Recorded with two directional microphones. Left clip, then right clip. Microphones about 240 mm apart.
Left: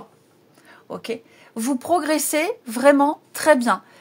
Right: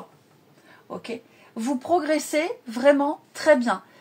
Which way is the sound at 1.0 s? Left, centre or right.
Left.